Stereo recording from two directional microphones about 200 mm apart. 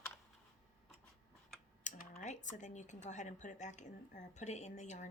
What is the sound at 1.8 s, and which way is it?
Speech, 40° left (ahead or behind).